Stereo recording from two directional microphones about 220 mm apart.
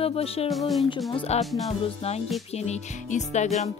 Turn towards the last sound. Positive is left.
turn(degrees=30)  # may be behind; listen again after turning